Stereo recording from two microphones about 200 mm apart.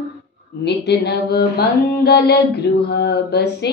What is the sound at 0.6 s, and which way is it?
Mantra, 55° left (ahead or behind).